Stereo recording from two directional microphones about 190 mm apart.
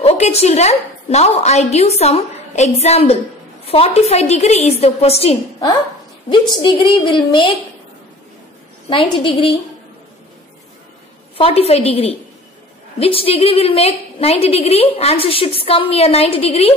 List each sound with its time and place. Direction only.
0.0 s a woman's voice: 35° left (ahead or behind)
8.8 s a woman's voice: 25° left (ahead or behind)
11.3 s a woman's voice: 30° left (ahead or behind)